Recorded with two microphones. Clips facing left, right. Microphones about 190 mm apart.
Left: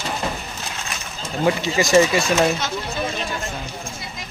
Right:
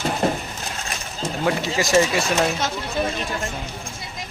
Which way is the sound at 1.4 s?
Centre (ahead or behind).